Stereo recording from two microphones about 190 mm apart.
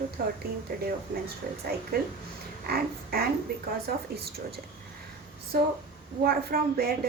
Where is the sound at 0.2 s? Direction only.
55° right (ahead or behind).